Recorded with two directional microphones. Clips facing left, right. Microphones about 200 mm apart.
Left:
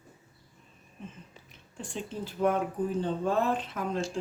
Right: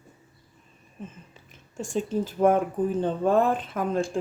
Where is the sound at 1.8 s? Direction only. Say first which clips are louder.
Right 10 dB; 45° right (ahead or behind).